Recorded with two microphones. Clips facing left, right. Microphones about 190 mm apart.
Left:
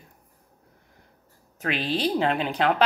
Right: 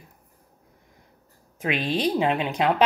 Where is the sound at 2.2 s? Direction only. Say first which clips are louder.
Right 1 dB; 5° right (ahead or behind).